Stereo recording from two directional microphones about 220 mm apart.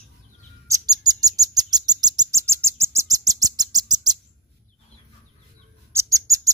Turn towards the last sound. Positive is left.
turn(degrees=-15)  # may be behind; listen again after turning